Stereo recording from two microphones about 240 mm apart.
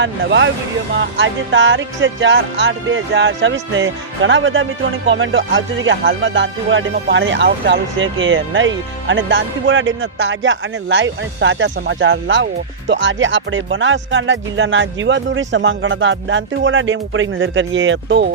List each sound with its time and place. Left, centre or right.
0.0 s music: right